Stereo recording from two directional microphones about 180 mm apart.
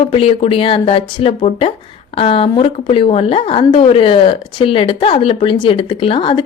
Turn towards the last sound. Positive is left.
turn(degrees=30)  # may be behind; listen again after turning